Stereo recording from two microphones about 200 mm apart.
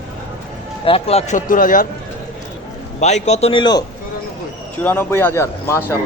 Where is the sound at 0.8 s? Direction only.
30° left (ahead or behind).